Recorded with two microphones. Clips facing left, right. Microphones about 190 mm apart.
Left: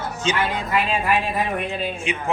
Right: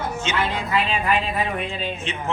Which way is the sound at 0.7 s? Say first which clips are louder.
Left 1 dB; 5° left (ahead or behind).